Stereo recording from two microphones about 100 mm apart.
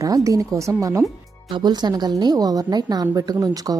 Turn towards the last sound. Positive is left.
turn(degrees=-40)  # may be behind; listen again after turning